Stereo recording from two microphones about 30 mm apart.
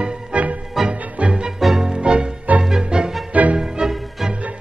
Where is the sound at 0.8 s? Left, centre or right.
Centre.